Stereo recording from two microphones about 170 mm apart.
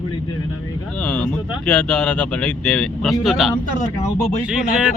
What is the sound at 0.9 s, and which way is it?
Speech, 5° left (ahead or behind).